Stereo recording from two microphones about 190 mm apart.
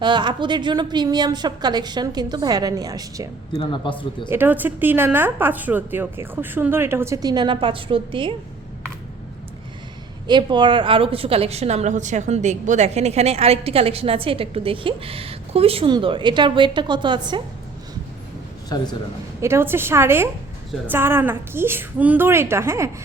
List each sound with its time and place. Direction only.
0.0 s a woman's voice: 25° right (ahead or behind)
3.5 s speech: 25° left (ahead or behind)
4.3 s a woman's voice: 10° right (ahead or behind); by 8.3 s 25° right (ahead or behind)
10.2 s a woman's voice: 25° right (ahead or behind)
18.7 s speech: 20° left (ahead or behind)
19.4 s a woman's voice: 15° right (ahead or behind)